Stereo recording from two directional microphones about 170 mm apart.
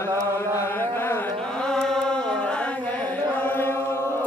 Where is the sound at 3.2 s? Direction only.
10° left (ahead or behind).